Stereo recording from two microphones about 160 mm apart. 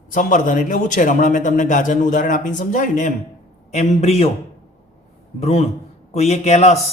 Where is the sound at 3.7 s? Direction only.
45° left (ahead or behind).